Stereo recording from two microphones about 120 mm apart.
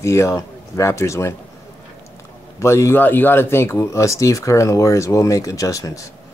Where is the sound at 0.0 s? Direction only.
25° left (ahead or behind).